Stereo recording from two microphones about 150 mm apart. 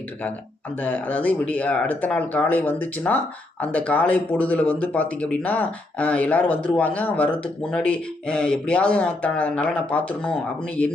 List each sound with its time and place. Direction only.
0.8 s speech: 10° left (ahead or behind)